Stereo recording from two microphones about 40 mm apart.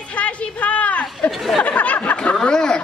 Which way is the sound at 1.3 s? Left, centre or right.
Centre.